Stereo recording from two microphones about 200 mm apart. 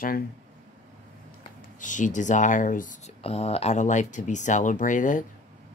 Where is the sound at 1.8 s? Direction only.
40° left (ahead or behind).